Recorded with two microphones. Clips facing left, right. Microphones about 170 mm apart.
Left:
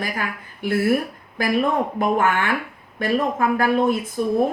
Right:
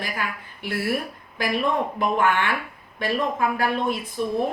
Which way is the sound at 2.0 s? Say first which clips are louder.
Left 1 dB; 45° left (ahead or behind).